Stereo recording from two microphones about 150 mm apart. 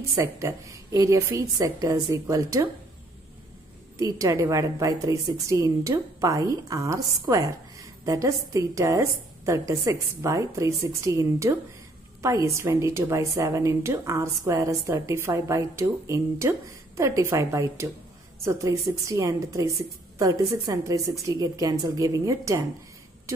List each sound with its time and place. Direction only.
0.1 s a woman's voice: 20° right (ahead or behind)
4.0 s a woman's voice: 20° right (ahead or behind)